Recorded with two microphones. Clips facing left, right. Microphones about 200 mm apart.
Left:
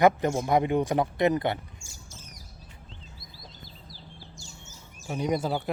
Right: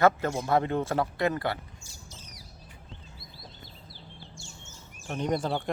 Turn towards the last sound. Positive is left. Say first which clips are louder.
# left 1 dB
turn(degrees=5)  # may be behind; listen again after turning